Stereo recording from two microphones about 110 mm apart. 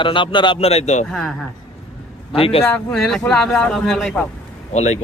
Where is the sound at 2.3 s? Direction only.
60° left (ahead or behind).